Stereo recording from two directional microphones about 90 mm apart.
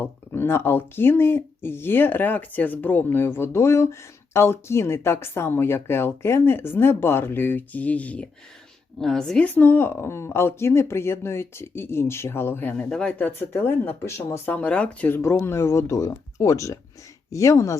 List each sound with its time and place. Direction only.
0.0 s speech: 25° left (ahead or behind)
9.0 s speech: 5° left (ahead or behind)
9.6 s speech: 25° left (ahead or behind)
12.7 s speech: 10° left (ahead or behind)
13.4 s speech: 25° left (ahead or behind)
14.5 s speech: 15° left (ahead or behind)
15.2 s speech: 25° left (ahead or behind)